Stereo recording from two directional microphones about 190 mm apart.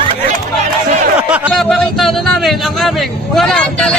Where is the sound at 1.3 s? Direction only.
5° right (ahead or behind).